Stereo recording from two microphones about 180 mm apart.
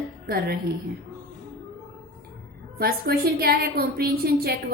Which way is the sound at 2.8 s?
60° right (ahead or behind).